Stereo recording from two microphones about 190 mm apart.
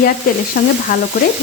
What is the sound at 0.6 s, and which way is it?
Speech, 50° left (ahead or behind).